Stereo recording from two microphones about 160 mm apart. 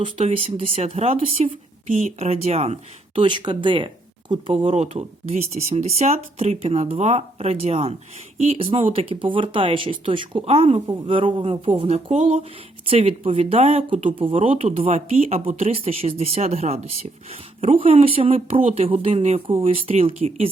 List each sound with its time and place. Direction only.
0.0 s speech: 40° right (ahead or behind)
3.2 s speech: 30° right (ahead or behind)